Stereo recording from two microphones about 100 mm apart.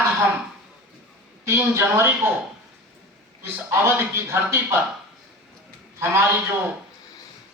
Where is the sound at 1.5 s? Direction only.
25° right (ahead or behind).